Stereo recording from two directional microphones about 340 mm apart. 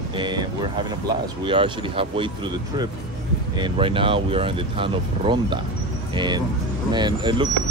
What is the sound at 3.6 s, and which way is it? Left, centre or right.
Speech, centre.